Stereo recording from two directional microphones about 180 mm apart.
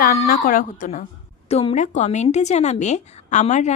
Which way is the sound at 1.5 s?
35° left (ahead or behind).